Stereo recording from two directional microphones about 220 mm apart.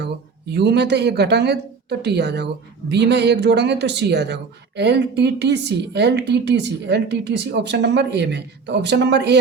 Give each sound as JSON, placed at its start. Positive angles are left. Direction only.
{"t": 0.0, "sound": "speech", "side_deg": -50}